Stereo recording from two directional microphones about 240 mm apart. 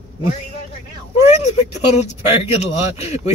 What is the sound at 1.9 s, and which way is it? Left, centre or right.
Speech, left.